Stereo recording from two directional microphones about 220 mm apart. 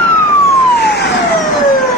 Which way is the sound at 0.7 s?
50° left (ahead or behind).